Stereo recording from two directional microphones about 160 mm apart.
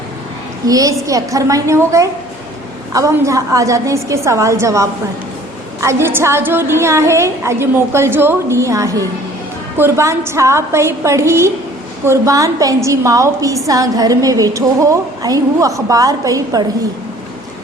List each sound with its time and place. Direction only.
0.7 s a woman's voice: 20° right (ahead or behind)